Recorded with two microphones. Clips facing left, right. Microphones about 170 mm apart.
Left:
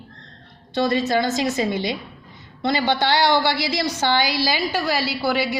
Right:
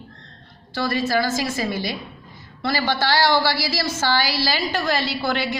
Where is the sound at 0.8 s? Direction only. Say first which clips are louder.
Left 2 dB; 20° left (ahead or behind).